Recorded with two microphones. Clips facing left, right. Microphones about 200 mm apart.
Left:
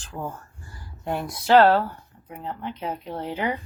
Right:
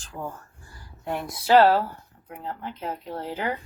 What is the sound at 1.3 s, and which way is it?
Speech, 5° right (ahead or behind).